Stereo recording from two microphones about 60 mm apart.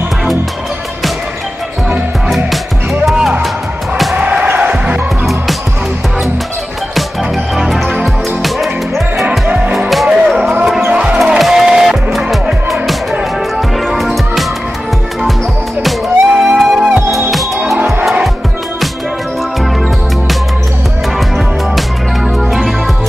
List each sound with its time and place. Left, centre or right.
2.2 s music: centre
4.2 s music: right
7.5 s music: centre
10.9 s music: centre
11.3 s music: centre
15.8 s music: centre
21.7 s music: centre